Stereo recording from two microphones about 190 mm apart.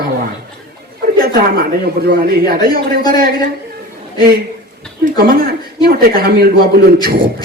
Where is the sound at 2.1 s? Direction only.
55° right (ahead or behind).